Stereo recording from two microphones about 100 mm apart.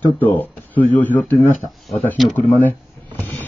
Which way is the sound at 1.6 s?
Centre (ahead or behind).